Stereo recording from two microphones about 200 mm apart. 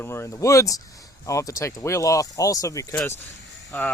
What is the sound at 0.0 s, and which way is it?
Speech, 15° left (ahead or behind).